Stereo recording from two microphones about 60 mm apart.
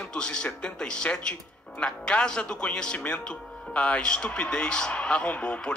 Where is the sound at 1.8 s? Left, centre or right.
Centre.